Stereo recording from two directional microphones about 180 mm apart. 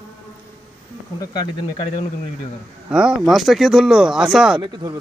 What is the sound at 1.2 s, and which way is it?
Speech, 25° left (ahead or behind).